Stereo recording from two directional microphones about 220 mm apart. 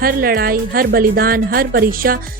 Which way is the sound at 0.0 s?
40° right (ahead or behind).